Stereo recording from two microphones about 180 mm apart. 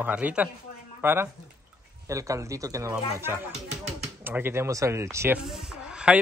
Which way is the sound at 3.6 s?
40° right (ahead or behind).